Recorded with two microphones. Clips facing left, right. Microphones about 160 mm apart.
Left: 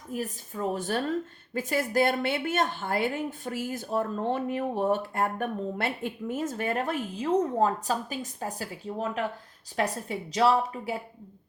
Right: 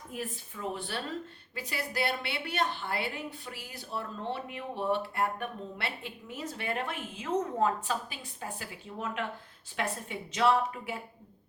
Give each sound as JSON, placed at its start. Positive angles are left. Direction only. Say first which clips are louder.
{"t": 0.1, "sound": "a woman's voice", "louder": "left 6 dB", "side_deg": 40}